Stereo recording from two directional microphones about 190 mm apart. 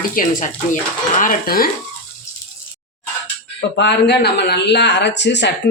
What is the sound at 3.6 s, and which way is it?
Speech, 60° left (ahead or behind).